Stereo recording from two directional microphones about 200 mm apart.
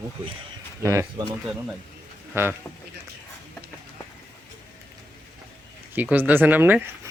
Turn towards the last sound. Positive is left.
turn(degrees=-10)  # may be behind; listen again after turning